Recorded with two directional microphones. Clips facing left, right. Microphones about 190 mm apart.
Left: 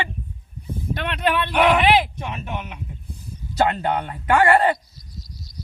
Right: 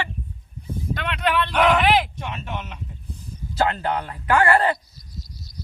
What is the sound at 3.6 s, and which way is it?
Speech, 25° left (ahead or behind).